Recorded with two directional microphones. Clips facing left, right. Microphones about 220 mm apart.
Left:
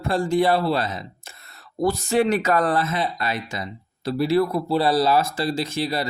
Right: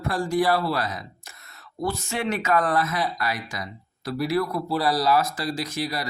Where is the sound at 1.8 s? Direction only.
35° left (ahead or behind).